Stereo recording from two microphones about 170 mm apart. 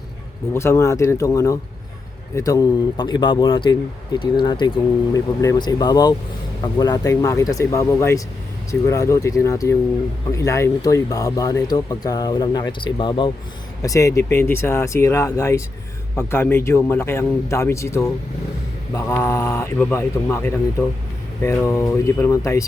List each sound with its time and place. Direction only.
0.5 s a man's voice: 15° left (ahead or behind)
13.8 s a man's voice: 20° left (ahead or behind)